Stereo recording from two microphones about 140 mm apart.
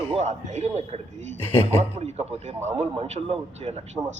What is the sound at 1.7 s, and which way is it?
A man's voice, 50° right (ahead or behind).